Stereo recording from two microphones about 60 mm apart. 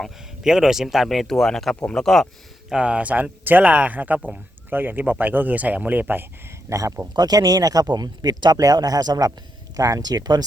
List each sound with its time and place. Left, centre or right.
0.4 s speech: centre
2.6 s speech: centre
6.7 s speech: right
7.3 s speech: right